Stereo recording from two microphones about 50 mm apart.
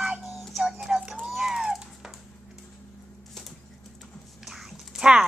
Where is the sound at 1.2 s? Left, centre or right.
Centre.